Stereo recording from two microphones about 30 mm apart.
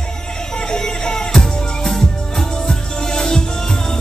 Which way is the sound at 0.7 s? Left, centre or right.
Left.